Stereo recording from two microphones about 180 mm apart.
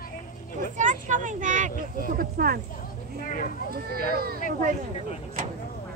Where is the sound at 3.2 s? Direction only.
45° left (ahead or behind).